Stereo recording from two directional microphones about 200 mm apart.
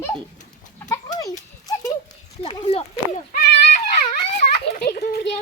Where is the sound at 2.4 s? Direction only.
30° left (ahead or behind).